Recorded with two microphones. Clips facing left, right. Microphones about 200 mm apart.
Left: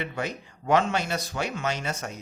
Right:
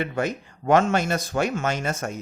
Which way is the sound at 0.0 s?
50° right (ahead or behind).